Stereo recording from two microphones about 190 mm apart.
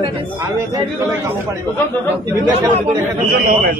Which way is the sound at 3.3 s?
50° right (ahead or behind).